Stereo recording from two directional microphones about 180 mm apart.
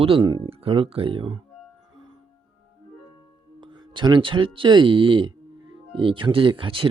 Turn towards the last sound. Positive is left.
turn(degrees=-30)  # may be behind; listen again after turning